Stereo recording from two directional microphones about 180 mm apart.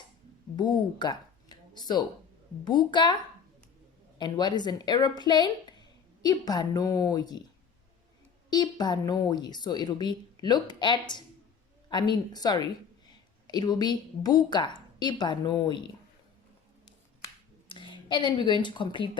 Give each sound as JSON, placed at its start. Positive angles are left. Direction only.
{"t": 0.5, "sound": "a woman's voice", "side_deg": 25}
{"t": 4.2, "sound": "a woman's voice", "side_deg": 25}
{"t": 8.4, "sound": "a woman's voice", "side_deg": 25}
{"t": 17.7, "sound": "speech", "side_deg": 25}